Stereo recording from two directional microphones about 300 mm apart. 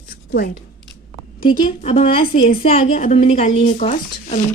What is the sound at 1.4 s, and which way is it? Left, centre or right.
Speech, centre.